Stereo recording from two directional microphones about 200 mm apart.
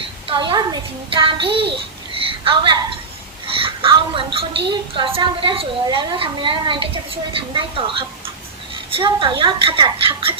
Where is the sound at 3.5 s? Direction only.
25° right (ahead or behind).